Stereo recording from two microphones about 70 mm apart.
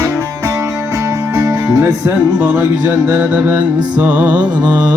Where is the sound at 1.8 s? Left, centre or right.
Right.